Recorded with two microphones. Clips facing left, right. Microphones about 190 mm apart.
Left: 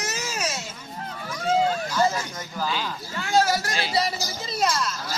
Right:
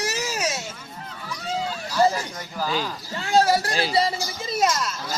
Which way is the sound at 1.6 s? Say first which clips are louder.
Left 7 dB; 55° left (ahead or behind).